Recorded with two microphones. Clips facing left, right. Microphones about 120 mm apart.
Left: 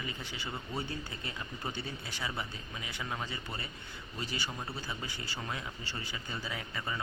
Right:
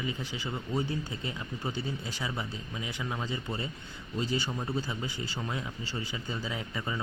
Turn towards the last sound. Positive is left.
turn(degrees=-20)  # may be behind; listen again after turning